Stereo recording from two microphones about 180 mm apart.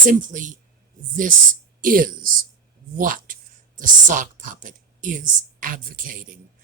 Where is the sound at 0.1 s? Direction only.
45° right (ahead or behind).